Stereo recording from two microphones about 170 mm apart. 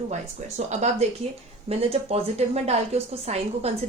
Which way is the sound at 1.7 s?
35° right (ahead or behind).